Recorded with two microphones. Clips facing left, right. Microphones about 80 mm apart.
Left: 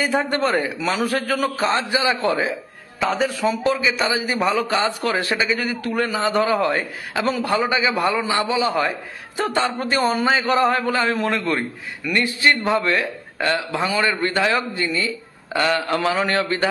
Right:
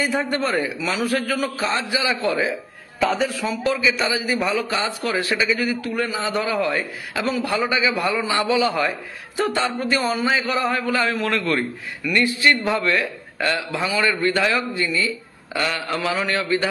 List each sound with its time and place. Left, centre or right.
0.0 s a man's voice: left
11.2 s a man's voice: left